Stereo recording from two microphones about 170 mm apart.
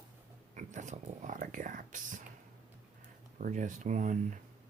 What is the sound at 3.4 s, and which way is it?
Speech, 50° right (ahead or behind).